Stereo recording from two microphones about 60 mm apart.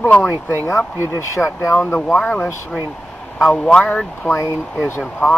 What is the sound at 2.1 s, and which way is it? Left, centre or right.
Speech, left.